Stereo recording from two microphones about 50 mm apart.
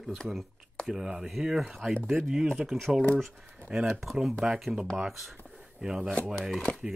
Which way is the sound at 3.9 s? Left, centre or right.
Centre.